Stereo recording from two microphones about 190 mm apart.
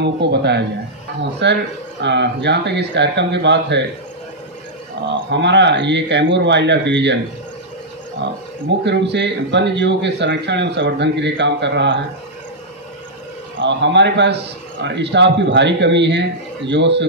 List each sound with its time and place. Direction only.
0.0 s speech: 65° right (ahead or behind)
5.0 s a man's voice: 70° right (ahead or behind)
8.2 s a man's voice: 70° right (ahead or behind)
13.6 s a man's voice: 70° right (ahead or behind)